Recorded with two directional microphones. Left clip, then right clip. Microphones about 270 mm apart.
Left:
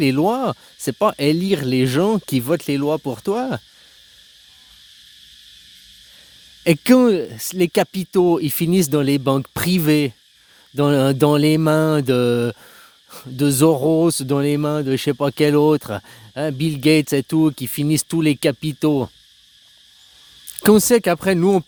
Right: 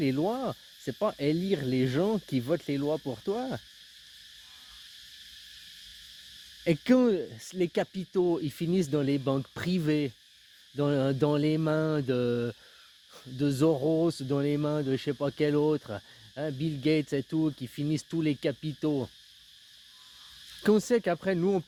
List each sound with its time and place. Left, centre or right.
0.0 s speech: left
6.7 s speech: left
20.6 s speech: left